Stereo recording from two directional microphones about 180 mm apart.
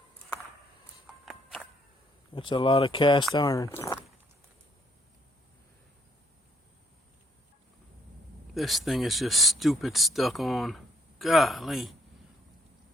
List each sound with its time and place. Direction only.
1.2 s a sound: centre (ahead or behind)
2.3 s speech: 30° left (ahead or behind)
8.5 s speech: centre (ahead or behind)